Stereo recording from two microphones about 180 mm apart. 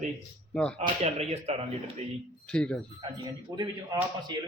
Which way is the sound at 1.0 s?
35° right (ahead or behind).